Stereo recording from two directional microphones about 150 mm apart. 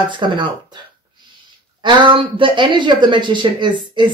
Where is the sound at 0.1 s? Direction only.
30° right (ahead or behind).